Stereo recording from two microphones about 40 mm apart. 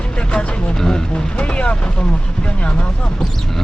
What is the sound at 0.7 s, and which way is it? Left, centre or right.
Speech, centre.